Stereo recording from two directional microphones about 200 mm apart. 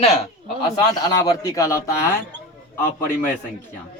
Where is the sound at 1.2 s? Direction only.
15° left (ahead or behind).